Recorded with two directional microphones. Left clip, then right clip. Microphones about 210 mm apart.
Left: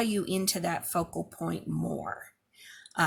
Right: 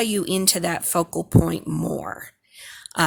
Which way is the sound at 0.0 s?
50° right (ahead or behind).